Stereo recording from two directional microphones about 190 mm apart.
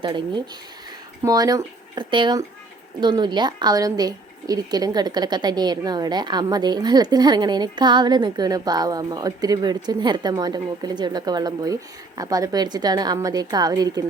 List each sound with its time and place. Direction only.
0.0 s speech: 25° right (ahead or behind)